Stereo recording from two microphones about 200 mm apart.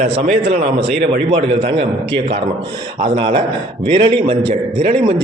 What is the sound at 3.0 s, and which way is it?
A man's voice, 25° right (ahead or behind).